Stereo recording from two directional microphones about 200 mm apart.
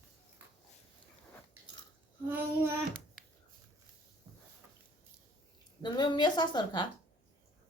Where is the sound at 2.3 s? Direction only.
10° right (ahead or behind).